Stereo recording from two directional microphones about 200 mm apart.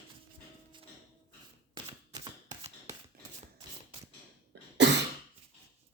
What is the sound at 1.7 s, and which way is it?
Single-lens reflex camera, 25° right (ahead or behind).